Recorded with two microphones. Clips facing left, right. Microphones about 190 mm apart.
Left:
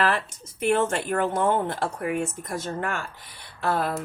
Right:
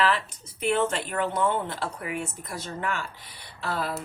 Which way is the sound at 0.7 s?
50° left (ahead or behind).